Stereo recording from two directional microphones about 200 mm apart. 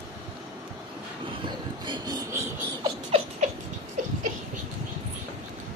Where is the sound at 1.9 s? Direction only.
20° right (ahead or behind).